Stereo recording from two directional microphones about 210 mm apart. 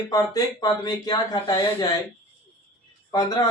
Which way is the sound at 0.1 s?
20° left (ahead or behind).